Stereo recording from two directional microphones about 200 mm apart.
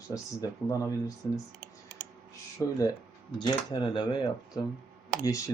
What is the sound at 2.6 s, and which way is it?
Speech, 10° left (ahead or behind).